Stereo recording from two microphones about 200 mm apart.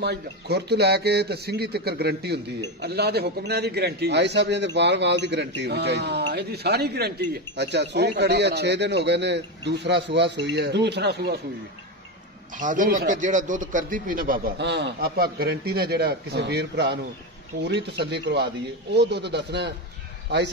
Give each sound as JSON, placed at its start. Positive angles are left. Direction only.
{"t": 0.0, "sound": "speech", "side_deg": -55}
{"t": 12.5, "sound": "a man's voice", "side_deg": -40}